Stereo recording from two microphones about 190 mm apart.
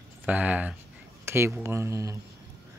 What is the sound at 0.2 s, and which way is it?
Speech, 10° right (ahead or behind).